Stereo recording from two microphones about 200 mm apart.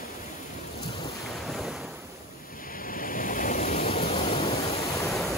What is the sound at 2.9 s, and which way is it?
Waves, 45° left (ahead or behind).